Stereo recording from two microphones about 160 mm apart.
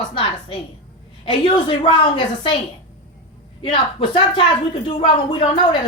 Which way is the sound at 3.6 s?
30° left (ahead or behind).